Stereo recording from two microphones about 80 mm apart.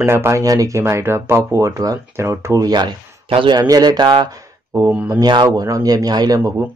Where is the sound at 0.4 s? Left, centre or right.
Right.